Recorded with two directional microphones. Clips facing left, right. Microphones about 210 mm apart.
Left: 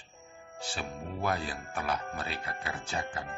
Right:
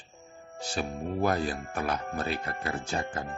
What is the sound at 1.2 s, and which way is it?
Speech, 45° right (ahead or behind).